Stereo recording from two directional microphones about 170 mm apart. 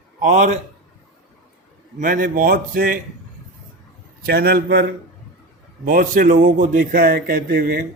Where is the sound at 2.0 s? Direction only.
55° right (ahead or behind).